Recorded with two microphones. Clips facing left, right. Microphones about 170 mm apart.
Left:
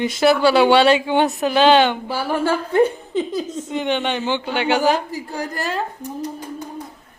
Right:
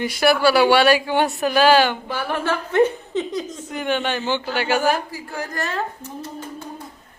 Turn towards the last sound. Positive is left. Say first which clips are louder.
# left 5 dB
turn(degrees=15)  # may be behind; listen again after turning